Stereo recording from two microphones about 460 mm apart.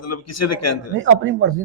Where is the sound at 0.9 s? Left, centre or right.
Right.